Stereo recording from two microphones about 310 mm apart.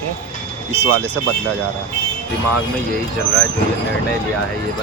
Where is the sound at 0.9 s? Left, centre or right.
Centre.